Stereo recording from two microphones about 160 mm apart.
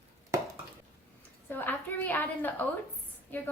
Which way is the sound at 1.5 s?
10° left (ahead or behind).